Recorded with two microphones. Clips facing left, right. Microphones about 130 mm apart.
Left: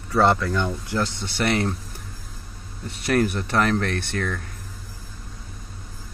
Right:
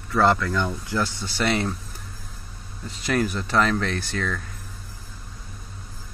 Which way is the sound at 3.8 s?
55° left (ahead or behind).